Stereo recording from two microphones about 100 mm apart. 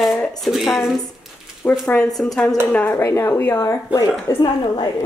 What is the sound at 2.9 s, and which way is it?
Speech, 25° left (ahead or behind).